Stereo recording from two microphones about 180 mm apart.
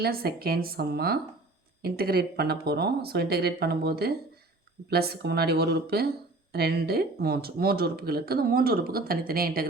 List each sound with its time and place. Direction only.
0.0 s speech: 60° right (ahead or behind)